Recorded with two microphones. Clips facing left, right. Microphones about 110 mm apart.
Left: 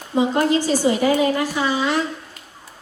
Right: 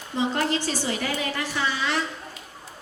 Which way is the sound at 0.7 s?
45° left (ahead or behind).